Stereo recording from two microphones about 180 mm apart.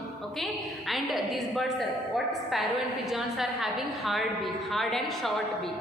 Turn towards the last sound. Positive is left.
turn(degrees=0)  # may be behind; listen again after turning